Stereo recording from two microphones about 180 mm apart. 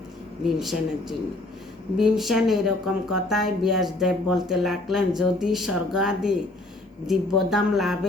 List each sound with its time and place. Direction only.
0.4 s speech: centre (ahead or behind)